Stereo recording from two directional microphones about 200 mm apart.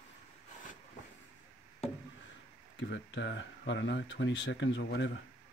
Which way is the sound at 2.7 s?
60° left (ahead or behind).